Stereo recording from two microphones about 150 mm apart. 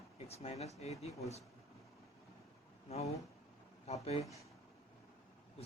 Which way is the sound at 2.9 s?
45° left (ahead or behind).